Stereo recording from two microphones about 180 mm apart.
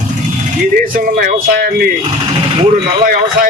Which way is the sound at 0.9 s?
50° right (ahead or behind).